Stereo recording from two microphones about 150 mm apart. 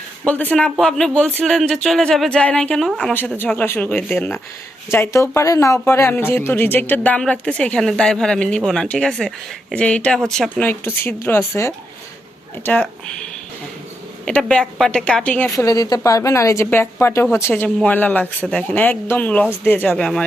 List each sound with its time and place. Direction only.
0.3 s speech: 10° left (ahead or behind)
3.1 s speech: 10° left (ahead or behind)
14.3 s speech: 5° left (ahead or behind)
15.5 s speech: 25° left (ahead or behind); by 20.2 s 5° left (ahead or behind)